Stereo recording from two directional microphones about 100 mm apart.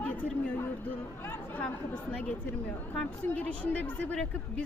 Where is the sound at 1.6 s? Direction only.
10° left (ahead or behind).